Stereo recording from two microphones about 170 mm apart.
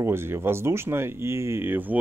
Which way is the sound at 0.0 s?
15° right (ahead or behind).